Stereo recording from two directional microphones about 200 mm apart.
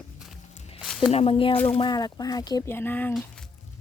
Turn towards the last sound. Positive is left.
turn(degrees=10)  # may be behind; listen again after turning